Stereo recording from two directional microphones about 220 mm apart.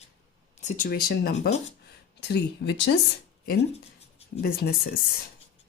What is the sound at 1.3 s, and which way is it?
Speech, 30° left (ahead or behind).